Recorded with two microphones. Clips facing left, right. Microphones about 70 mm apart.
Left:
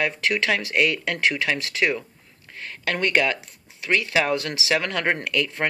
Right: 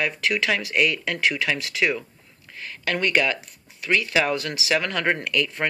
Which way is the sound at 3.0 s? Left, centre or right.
Left.